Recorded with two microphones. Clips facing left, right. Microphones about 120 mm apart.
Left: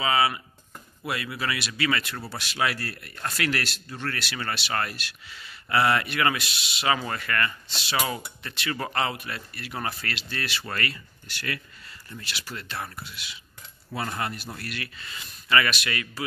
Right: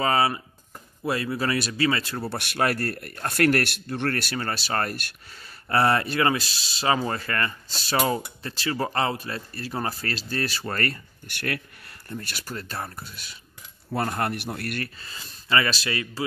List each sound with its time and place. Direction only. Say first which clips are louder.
0.0 s a man's voice: right 2 dB; 35° right (ahead or behind)
2.2 s a man's voice: right 5 dB; 55° right (ahead or behind)
15.0 s a man's voice: left 1 dB; 35° right (ahead or behind)